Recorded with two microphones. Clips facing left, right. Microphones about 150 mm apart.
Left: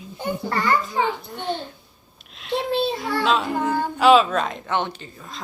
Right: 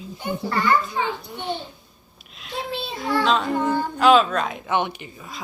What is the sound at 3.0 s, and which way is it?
A woman's voice, 5° left (ahead or behind).